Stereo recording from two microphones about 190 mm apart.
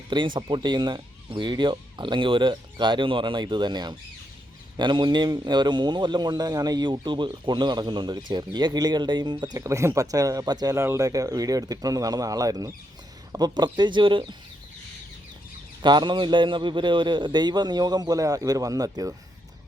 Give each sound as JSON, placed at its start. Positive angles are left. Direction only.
{"t": 0.1, "sound": "a man's voice", "side_deg": -25}
{"t": 15.8, "sound": "a man's voice", "side_deg": -25}